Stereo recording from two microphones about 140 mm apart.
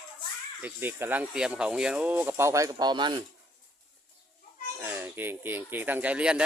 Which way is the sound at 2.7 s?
35° right (ahead or behind).